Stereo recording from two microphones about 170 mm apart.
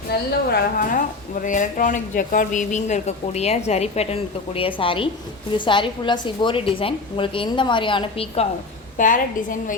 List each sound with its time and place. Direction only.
0.5 s a woman's voice: 55° left (ahead or behind); by 8.4 s 35° left (ahead or behind)
9.0 s a woman's voice: 50° left (ahead or behind)